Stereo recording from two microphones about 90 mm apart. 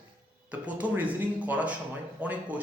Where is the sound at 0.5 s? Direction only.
15° right (ahead or behind).